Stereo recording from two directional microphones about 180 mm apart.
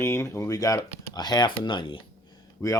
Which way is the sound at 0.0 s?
15° left (ahead or behind).